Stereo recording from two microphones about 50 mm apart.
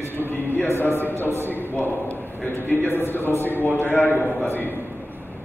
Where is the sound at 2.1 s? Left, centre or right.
Left.